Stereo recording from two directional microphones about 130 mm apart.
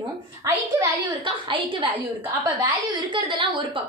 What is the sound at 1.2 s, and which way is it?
A woman's voice, 40° right (ahead or behind).